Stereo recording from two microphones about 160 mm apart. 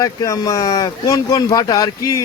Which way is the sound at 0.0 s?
25° left (ahead or behind).